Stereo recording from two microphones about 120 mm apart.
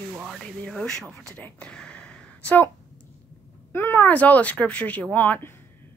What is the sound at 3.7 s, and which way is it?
A woman's voice, 20° left (ahead or behind).